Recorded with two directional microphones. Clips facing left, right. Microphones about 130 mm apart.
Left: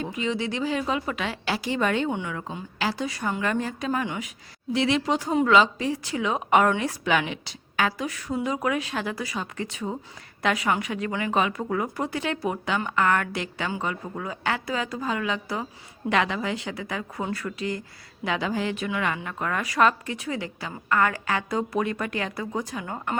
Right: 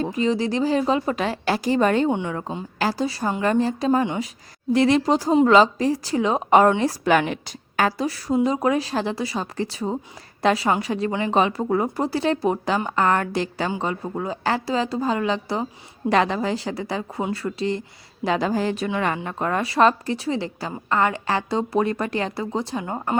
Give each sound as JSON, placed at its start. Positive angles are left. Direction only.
{"t": 0.0, "sound": "speech", "side_deg": -40}
{"t": 2.0, "sound": "speech", "side_deg": -30}
{"t": 4.7, "sound": "speech", "side_deg": -45}